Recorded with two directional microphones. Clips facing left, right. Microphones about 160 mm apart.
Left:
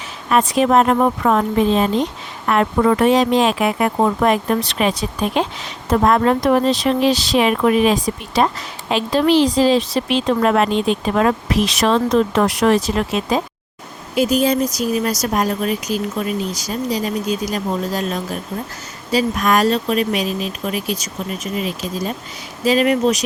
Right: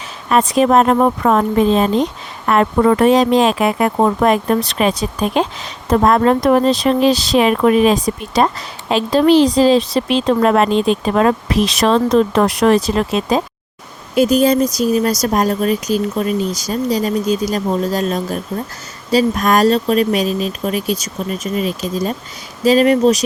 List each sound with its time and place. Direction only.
0.3 s speech: 35° right (ahead or behind)
22.6 s speech: 35° right (ahead or behind)